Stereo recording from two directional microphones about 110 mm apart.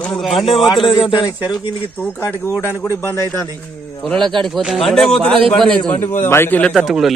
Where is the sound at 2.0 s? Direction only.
20° left (ahead or behind).